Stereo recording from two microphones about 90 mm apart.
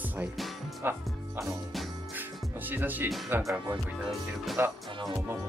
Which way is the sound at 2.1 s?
20° right (ahead or behind).